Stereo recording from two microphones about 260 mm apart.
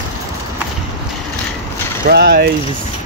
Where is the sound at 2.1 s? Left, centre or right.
Right.